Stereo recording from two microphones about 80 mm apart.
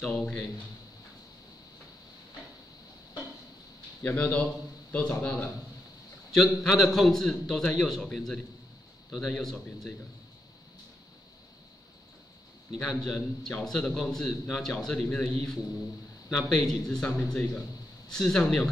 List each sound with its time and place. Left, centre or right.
0.0 s a man's voice: centre
4.0 s speech: centre
6.3 s a man's voice: centre
12.8 s a man's voice: centre
18.1 s speech: centre